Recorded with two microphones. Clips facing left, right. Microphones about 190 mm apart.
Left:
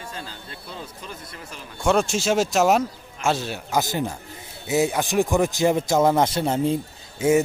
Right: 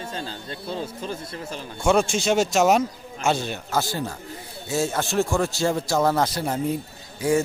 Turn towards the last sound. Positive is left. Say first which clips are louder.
# left 3 dB
turn(degrees=25)  # may be behind; listen again after turning